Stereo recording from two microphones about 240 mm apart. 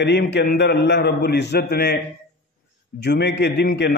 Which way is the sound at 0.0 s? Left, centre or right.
Left.